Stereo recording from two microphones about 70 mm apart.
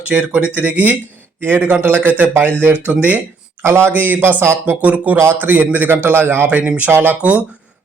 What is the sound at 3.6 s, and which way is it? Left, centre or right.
A man's voice, right.